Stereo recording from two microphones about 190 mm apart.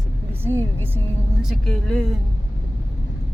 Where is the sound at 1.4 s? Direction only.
Centre (ahead or behind).